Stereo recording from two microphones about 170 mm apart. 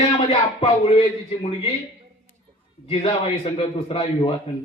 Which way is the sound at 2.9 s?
35° left (ahead or behind).